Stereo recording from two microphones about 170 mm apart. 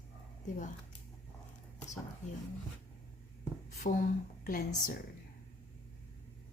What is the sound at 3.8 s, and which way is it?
Speech, 50° left (ahead or behind).